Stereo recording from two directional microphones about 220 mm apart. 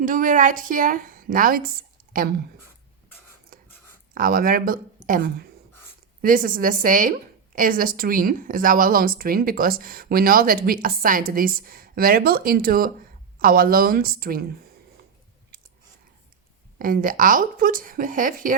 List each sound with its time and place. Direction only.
0.0 s a woman's voice: 35° right (ahead or behind)
4.1 s a woman's voice: 40° right (ahead or behind)
16.7 s a woman's voice: 40° right (ahead or behind)